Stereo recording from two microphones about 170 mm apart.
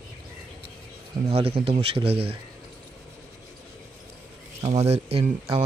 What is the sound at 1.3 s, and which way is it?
Speech, 35° right (ahead or behind).